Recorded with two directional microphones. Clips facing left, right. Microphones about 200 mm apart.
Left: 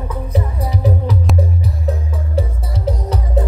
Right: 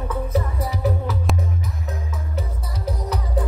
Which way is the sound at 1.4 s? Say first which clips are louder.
Left 7 dB; 35° left (ahead or behind).